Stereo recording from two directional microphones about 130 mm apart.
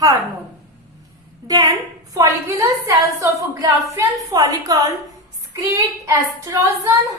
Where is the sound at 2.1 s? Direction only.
25° right (ahead or behind).